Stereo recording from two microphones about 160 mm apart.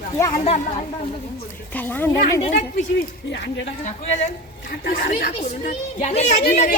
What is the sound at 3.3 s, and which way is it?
Speech, 90° left.